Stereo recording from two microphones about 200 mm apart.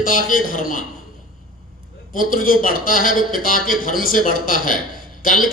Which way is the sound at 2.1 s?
45° left (ahead or behind).